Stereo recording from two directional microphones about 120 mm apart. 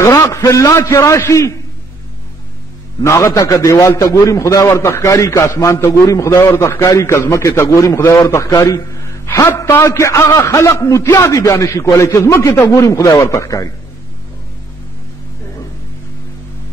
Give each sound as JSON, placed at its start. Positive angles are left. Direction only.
{"t": 0.0, "sound": "a man's voice", "side_deg": 25}
{"t": 3.0, "sound": "a man's voice", "side_deg": 25}